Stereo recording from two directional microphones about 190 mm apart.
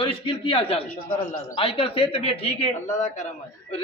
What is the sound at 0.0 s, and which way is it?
A man's voice, 30° left (ahead or behind).